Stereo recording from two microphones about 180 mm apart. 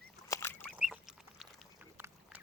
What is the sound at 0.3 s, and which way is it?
Fowl, 15° left (ahead or behind).